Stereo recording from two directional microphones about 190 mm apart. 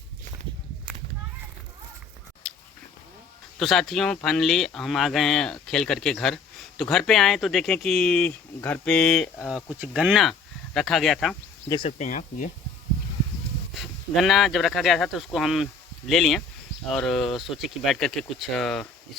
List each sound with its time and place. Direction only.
2.4 s a sound: centre (ahead or behind)
3.6 s speech: centre (ahead or behind)
11.9 s speech: 40° left (ahead or behind)
13.7 s speech: centre (ahead or behind)